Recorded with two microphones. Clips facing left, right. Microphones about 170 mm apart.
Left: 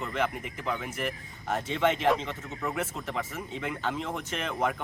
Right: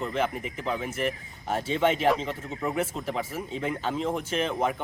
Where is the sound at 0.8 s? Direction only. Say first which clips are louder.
Right 4 dB; 5° right (ahead or behind).